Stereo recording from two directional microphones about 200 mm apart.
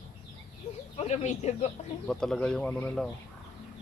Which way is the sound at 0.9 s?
35° left (ahead or behind).